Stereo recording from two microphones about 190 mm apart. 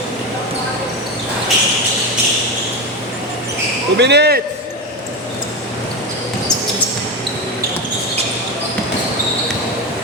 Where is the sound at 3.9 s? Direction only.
60° right (ahead or behind).